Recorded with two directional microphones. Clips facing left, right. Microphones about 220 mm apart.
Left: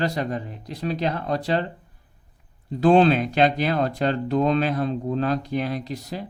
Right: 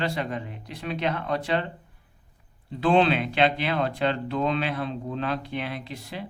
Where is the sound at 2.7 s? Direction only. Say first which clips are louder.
Left 5 dB; 40° left (ahead or behind).